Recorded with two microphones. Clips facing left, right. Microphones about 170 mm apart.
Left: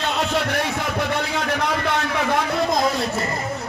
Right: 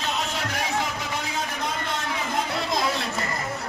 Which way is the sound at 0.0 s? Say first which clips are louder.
Left 6 dB; 65° left (ahead or behind).